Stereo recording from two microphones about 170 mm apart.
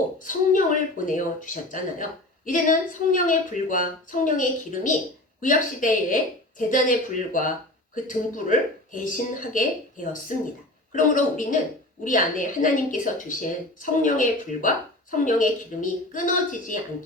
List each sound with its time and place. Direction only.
0.3 s a woman's voice: 50° left (ahead or behind)
7.9 s a woman's voice: 50° left (ahead or behind)